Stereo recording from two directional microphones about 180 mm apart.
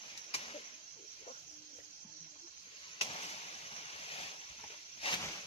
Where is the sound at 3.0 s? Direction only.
30° left (ahead or behind).